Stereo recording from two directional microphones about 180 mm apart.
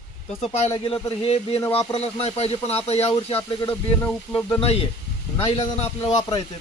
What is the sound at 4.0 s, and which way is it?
Speech, 10° left (ahead or behind).